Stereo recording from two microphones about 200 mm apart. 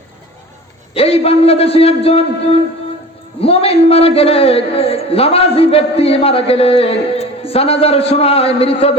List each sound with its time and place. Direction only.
0.9 s a man's voice: 30° left (ahead or behind)